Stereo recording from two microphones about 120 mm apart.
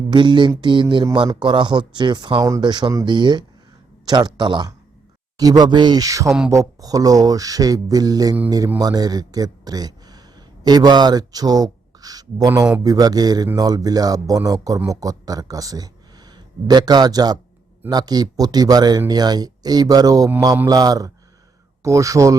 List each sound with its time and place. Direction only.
0.1 s speech: 40° right (ahead or behind)
6.2 s speech: 5° right (ahead or behind)
6.5 s speech: 25° right (ahead or behind)